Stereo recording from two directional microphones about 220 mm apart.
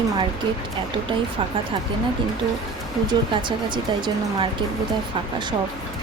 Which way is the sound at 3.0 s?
20° right (ahead or behind).